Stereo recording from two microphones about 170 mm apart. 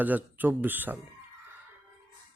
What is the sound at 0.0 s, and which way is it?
Speech, 10° right (ahead or behind).